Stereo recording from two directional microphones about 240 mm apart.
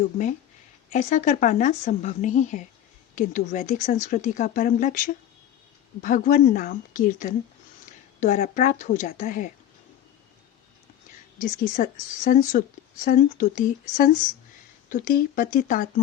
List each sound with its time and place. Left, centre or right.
0.0 s speech: left
11.3 s speech: left